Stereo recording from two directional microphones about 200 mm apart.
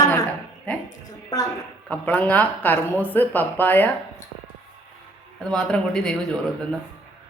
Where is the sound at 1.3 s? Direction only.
20° left (ahead or behind).